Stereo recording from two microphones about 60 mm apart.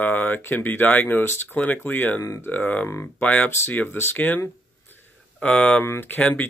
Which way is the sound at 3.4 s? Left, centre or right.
Left.